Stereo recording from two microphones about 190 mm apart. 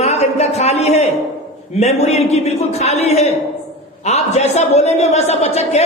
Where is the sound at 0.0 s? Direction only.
35° left (ahead or behind).